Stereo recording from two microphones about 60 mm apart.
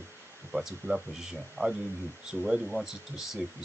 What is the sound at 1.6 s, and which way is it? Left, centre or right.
Speech, left.